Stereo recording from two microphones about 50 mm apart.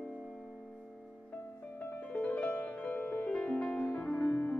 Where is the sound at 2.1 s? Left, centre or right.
Left.